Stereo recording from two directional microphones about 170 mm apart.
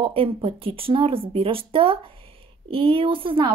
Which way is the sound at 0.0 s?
30° right (ahead or behind).